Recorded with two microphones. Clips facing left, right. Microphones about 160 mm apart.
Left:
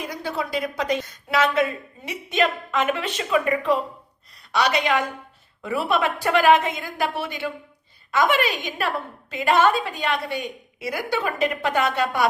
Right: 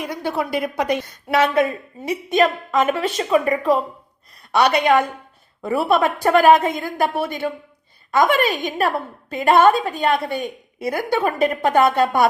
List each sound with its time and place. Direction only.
0.2 s a woman's voice: 60° right (ahead or behind)
2.0 s a woman's voice: 40° right (ahead or behind)
4.5 s a woman's voice: 55° right (ahead or behind)